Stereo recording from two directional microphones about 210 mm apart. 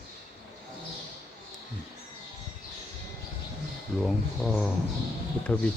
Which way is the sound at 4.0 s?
Centre (ahead or behind).